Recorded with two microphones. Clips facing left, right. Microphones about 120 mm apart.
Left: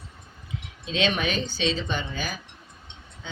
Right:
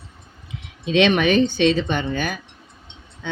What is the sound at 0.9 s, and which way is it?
Speech, 65° right (ahead or behind).